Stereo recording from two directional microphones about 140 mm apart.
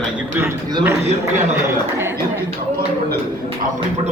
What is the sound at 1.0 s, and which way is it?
Speech, 55° right (ahead or behind).